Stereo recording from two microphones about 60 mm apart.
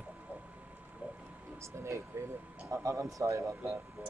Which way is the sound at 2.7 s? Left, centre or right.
Right.